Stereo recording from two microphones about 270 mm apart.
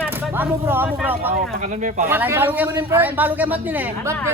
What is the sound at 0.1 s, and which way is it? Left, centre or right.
Speech, centre.